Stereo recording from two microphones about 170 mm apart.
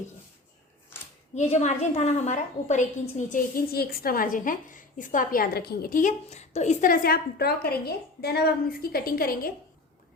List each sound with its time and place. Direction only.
1.4 s a woman's voice: 40° left (ahead or behind); by 9.5 s 60° left (ahead or behind)